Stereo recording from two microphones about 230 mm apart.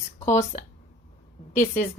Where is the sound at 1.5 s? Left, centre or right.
Left.